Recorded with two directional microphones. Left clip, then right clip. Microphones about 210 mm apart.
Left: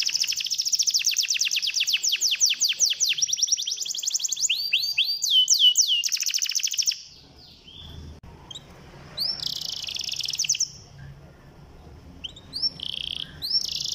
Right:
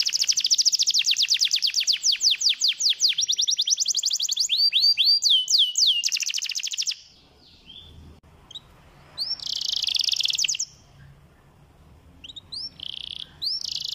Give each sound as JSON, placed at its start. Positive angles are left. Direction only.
{"t": 0.0, "sound": "bird", "side_deg": -30}
{"t": 9.2, "sound": "bird vocalization", "side_deg": -10}
{"t": 9.8, "sound": "bird", "side_deg": -25}
{"t": 12.3, "sound": "chirp", "side_deg": 5}
{"t": 12.7, "sound": "chirp", "side_deg": -15}